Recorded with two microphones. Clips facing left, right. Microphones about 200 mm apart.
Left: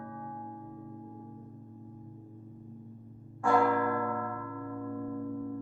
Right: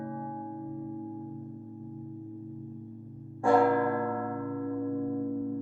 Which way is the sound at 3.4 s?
30° right (ahead or behind).